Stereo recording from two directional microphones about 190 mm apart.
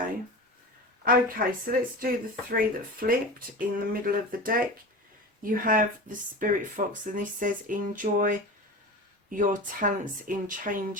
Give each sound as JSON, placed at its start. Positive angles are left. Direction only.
{"t": 1.0, "sound": "speech", "side_deg": -50}